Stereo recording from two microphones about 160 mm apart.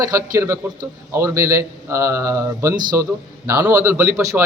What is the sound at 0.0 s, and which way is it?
A man's voice, 20° right (ahead or behind).